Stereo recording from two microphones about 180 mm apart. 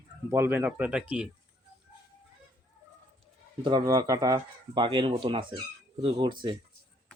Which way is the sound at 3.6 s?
25° right (ahead or behind).